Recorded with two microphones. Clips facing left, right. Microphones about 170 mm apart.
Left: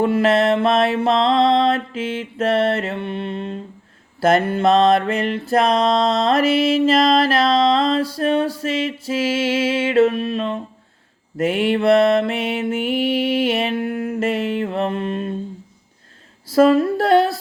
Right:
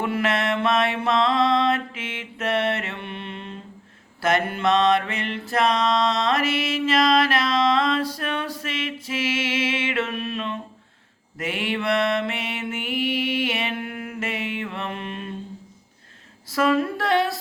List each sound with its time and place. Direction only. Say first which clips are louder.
0.0 s mantra: left 8 dB; 30° left (ahead or behind)
16.5 s music: left 8 dB; 35° left (ahead or behind)